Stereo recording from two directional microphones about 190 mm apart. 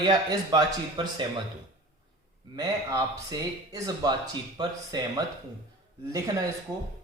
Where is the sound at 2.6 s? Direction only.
20° right (ahead or behind).